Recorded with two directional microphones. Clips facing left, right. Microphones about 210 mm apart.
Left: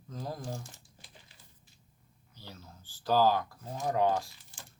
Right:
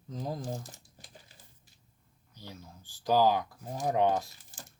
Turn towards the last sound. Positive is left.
turn(degrees=-20)  # may be behind; listen again after turning